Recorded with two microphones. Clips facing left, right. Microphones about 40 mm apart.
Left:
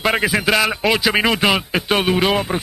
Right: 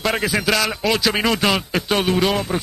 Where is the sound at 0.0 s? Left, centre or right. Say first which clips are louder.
Left 3 dB; centre.